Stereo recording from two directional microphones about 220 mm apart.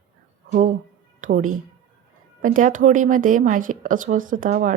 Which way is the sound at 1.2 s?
35° right (ahead or behind).